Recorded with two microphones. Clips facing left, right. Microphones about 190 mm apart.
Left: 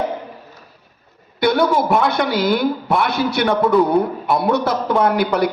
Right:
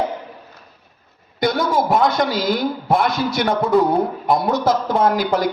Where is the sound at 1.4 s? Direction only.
60° left (ahead or behind).